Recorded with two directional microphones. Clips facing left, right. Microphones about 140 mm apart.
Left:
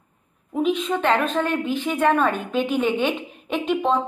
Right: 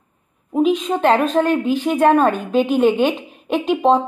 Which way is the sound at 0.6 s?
40° right (ahead or behind).